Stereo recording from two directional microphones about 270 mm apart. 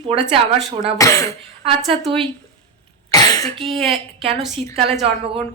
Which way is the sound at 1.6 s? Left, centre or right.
Right.